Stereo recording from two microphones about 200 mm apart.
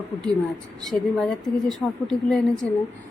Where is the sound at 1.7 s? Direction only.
Centre (ahead or behind).